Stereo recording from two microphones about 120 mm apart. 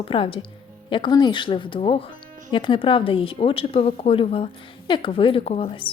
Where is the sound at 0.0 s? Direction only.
50° left (ahead or behind).